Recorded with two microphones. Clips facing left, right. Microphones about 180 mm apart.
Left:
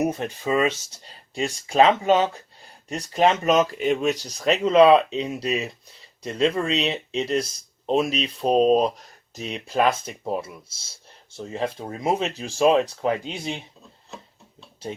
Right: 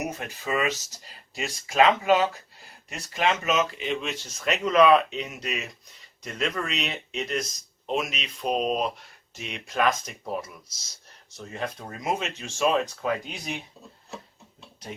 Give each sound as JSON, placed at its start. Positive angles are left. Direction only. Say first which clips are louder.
{"t": 0.0, "sound": "speech", "louder": "left 8 dB", "side_deg": 30}